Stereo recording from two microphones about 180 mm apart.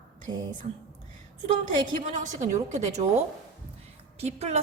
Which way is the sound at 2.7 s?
40° right (ahead or behind).